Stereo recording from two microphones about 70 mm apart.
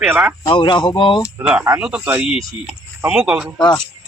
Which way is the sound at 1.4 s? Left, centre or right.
Centre.